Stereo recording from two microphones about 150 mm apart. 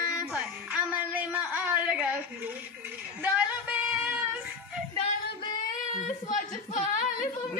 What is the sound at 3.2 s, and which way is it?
Female singing, 10° right (ahead or behind).